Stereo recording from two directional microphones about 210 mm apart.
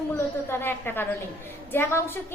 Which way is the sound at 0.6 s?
10° left (ahead or behind).